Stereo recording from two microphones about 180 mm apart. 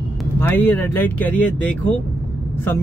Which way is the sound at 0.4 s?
10° left (ahead or behind).